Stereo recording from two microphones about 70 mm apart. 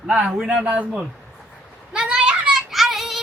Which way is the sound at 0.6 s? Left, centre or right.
Right.